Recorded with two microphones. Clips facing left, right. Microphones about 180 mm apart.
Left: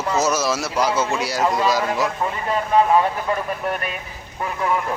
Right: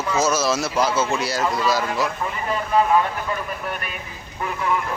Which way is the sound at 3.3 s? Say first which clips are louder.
Left 4 dB; 35° left (ahead or behind).